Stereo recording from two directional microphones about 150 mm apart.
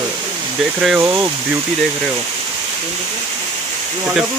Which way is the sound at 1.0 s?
20° right (ahead or behind).